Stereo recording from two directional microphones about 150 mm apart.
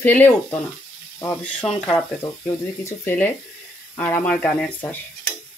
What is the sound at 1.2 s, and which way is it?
Frying, 10° left (ahead or behind).